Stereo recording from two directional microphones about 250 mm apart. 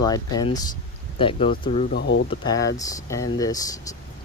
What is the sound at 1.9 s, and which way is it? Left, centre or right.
Speech, left.